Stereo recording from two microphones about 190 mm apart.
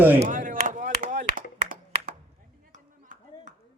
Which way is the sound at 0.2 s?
45° right (ahead or behind).